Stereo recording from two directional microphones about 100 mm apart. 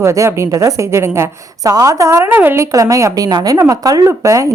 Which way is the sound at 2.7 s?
35° right (ahead or behind).